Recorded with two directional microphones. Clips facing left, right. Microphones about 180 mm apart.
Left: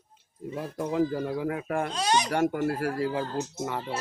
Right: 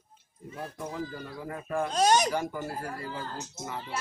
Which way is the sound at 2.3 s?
70° left (ahead or behind).